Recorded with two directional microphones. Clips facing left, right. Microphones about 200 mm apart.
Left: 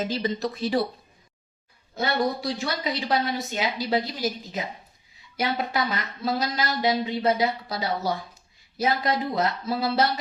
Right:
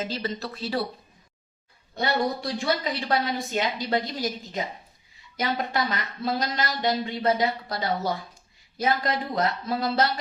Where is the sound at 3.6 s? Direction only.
5° left (ahead or behind).